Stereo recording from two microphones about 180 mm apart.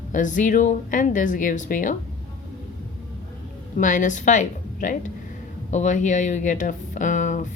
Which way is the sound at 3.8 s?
45° left (ahead or behind).